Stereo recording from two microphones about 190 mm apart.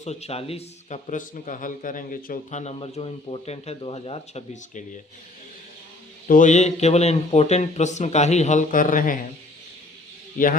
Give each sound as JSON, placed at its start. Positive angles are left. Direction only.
{"t": 0.0, "sound": "a man's voice", "side_deg": 35}
{"t": 6.2, "sound": "a man's voice", "side_deg": 45}
{"t": 10.4, "sound": "a man's voice", "side_deg": 45}